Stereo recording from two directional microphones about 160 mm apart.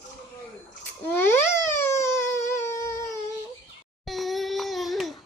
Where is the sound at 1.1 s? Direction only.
15° left (ahead or behind).